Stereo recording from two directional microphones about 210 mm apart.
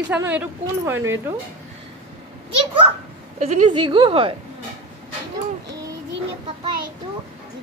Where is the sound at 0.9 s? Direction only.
65° right (ahead or behind).